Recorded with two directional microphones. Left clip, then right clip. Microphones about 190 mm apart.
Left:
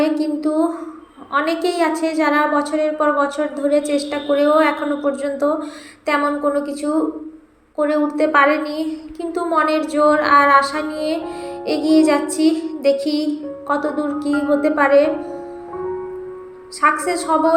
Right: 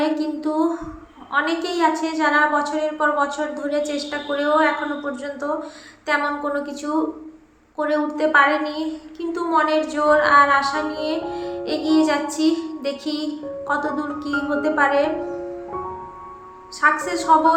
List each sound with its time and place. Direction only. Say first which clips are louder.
0.0 s a sound: left 4 dB; 15° left (ahead or behind)
1.3 s a woman's voice: left 3 dB; 15° left (ahead or behind)
16.8 s a woman's voice: left 2 dB; 15° left (ahead or behind)